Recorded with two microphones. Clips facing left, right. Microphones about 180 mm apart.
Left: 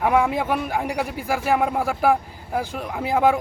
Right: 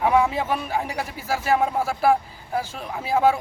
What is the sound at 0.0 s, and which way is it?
A man's voice, 10° left (ahead or behind).